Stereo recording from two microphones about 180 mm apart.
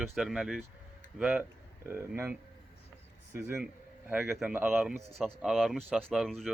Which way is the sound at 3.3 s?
15° right (ahead or behind).